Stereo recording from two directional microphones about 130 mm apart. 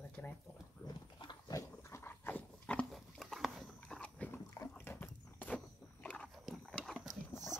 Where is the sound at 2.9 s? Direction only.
Centre (ahead or behind).